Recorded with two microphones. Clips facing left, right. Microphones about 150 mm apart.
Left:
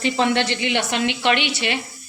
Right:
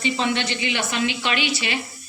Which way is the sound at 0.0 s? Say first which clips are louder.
Left 4 dB; 70° left (ahead or behind).